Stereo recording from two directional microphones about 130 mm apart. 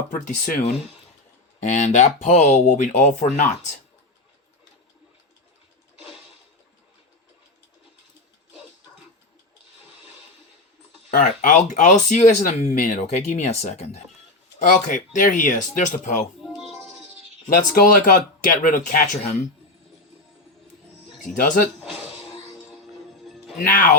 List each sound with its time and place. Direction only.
0.1 s speech: 90° left
1.6 s speech: 75° left (ahead or behind)
11.1 s speech: 85° left; by 14.0 s 55° left (ahead or behind)
14.6 s speech: 85° left
17.5 s speech: 90° left
21.2 s speech: 80° left
21.8 s music: 5° right (ahead or behind)
23.2 s music: centre (ahead or behind)
23.6 s speech: 90° left